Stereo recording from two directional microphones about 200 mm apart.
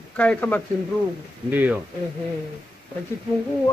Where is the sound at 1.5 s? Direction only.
10° right (ahead or behind).